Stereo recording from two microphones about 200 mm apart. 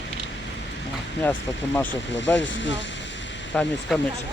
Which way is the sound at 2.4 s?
65° left (ahead or behind).